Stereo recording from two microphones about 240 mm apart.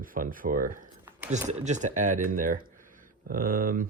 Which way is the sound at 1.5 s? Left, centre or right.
Right.